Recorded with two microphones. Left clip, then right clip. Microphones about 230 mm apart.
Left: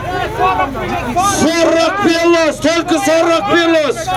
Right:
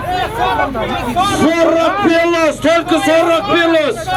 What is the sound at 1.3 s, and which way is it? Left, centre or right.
Speech, left.